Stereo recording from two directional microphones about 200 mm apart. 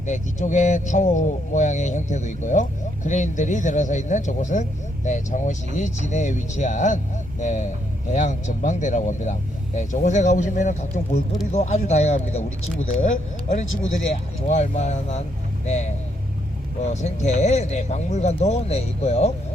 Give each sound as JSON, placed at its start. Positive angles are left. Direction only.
{"t": 0.0, "sound": "speech", "side_deg": 40}
{"t": 16.9, "sound": "speech", "side_deg": 35}